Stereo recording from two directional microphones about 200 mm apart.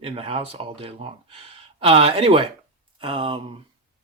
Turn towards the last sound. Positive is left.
turn(degrees=-25)  # may be behind; listen again after turning